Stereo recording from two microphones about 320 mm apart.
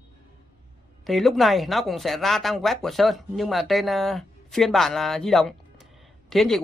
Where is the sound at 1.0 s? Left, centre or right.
Centre.